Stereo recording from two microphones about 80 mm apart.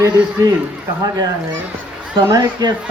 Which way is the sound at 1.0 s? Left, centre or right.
Right.